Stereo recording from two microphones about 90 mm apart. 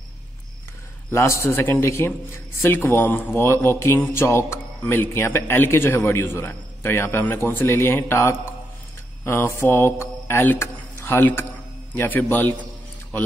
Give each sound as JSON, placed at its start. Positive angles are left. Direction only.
{"t": 1.1, "sound": "speech", "side_deg": 35}
{"t": 9.2, "sound": "mantra", "side_deg": 25}
{"t": 11.9, "sound": "speech", "side_deg": 20}